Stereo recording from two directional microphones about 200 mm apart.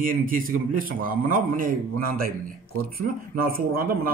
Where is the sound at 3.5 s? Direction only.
45° right (ahead or behind).